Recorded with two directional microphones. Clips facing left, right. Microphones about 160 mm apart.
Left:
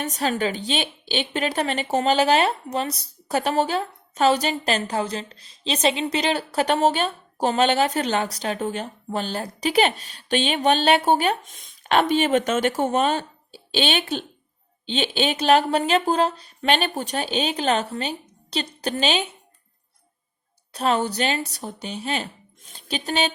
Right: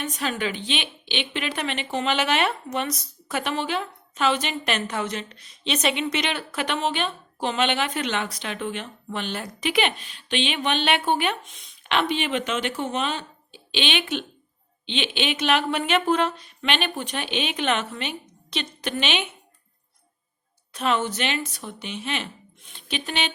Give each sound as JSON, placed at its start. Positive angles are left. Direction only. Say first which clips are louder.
{"t": 0.0, "sound": "a woman's voice", "louder": "left 4 dB", "side_deg": 40}
{"t": 20.7, "sound": "a woman's voice", "louder": "left 2 dB", "side_deg": 35}